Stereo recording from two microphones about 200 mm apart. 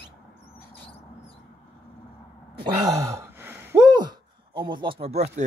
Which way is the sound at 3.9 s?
25° right (ahead or behind).